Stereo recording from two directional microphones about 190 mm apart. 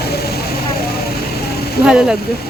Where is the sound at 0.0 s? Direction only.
55° left (ahead or behind).